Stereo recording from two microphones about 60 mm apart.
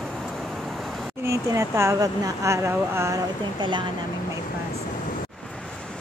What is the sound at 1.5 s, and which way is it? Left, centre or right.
Speech, right.